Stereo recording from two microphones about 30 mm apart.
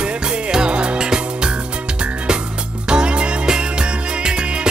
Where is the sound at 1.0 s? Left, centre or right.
Right.